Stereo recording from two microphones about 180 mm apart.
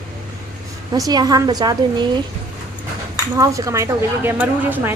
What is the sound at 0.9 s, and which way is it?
A woman's voice, 20° right (ahead or behind).